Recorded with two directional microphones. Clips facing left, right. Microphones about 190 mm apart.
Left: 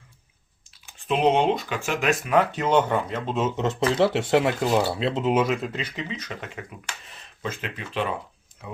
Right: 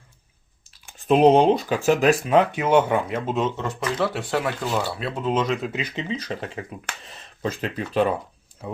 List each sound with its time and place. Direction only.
0.7 s speech: 45° right (ahead or behind)
2.3 s speech: 15° right (ahead or behind)
3.6 s speech: 25° left (ahead or behind)
5.3 s speech: 10° left (ahead or behind)
5.9 s speech: 30° right (ahead or behind)